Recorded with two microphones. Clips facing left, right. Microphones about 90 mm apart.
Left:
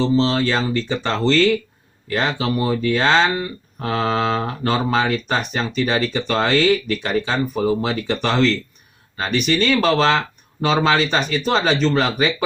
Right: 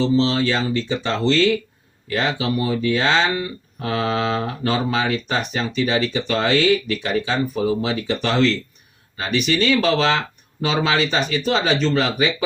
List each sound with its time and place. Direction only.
0.0 s speech: 40° left (ahead or behind)